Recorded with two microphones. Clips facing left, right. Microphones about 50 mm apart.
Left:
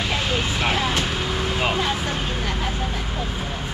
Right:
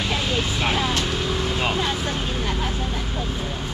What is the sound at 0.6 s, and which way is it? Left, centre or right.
Vehicle, centre.